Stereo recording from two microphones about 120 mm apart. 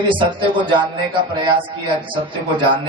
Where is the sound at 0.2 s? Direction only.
45° right (ahead or behind).